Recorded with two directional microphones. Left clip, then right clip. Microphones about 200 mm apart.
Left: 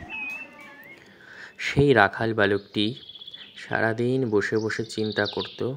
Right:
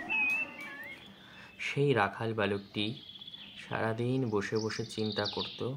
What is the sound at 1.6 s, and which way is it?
Speech, 35° left (ahead or behind).